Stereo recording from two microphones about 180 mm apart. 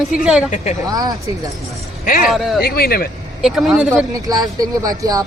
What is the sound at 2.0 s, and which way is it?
Speech, 50° left (ahead or behind).